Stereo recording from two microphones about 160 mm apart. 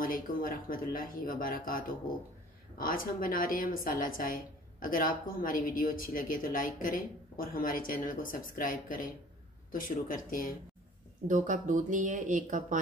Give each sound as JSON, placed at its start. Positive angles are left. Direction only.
{"t": 0.0, "sound": "a woman's voice", "side_deg": 60}
{"t": 11.2, "sound": "speech", "side_deg": -50}